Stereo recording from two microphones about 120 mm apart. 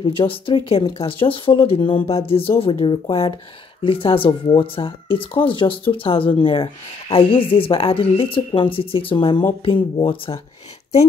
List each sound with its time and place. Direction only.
0.0 s speech: 45° left (ahead or behind)